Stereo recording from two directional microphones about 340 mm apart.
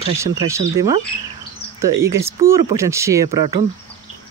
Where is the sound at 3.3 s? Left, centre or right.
Right.